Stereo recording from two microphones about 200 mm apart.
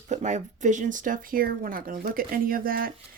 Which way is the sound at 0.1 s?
35° right (ahead or behind).